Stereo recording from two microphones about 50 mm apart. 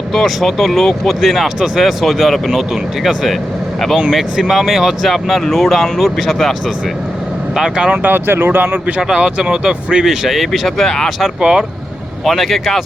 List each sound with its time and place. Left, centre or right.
0.1 s speech: centre
7.5 s speech: centre
8.1 s speech: right
8.4 s speech: right
9.0 s speech: centre
11.3 s speech: centre
12.2 s speech: centre